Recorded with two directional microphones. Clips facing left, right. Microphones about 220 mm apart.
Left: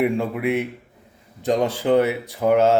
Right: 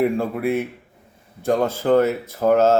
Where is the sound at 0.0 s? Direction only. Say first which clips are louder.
Right 1 dB; 15° left (ahead or behind).